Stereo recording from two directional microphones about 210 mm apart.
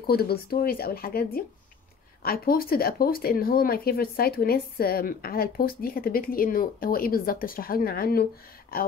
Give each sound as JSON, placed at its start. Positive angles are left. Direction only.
{"t": 0.0, "sound": "speech", "side_deg": 45}